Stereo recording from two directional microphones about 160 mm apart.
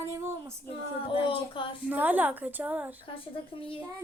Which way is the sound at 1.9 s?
10° right (ahead or behind).